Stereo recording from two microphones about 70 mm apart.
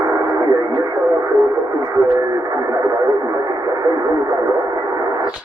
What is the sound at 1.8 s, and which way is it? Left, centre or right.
Radio, right.